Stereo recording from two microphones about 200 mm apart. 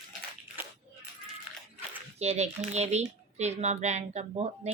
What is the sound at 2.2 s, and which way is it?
Speech, 35° right (ahead or behind).